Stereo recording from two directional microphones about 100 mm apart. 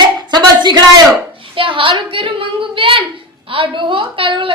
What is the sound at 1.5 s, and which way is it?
A woman's voice, 55° right (ahead or behind).